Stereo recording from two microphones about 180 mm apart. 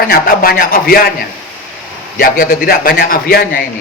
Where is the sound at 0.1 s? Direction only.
55° left (ahead or behind).